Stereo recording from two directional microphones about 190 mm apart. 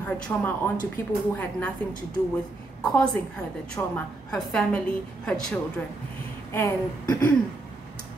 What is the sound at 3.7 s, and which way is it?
A woman's voice, 5° left (ahead or behind).